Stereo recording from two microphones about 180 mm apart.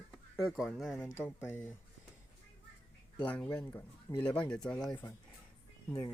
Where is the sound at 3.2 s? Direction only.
10° left (ahead or behind).